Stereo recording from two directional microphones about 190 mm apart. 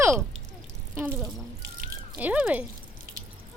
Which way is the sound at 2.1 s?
10° right (ahead or behind).